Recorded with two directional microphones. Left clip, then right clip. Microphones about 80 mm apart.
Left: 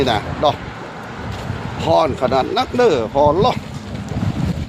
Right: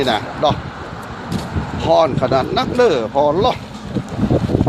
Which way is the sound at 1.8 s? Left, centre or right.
Left.